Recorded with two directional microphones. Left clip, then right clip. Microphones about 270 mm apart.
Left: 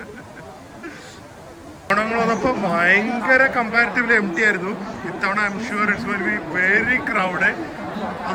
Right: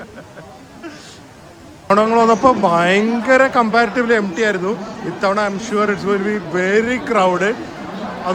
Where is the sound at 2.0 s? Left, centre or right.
Centre.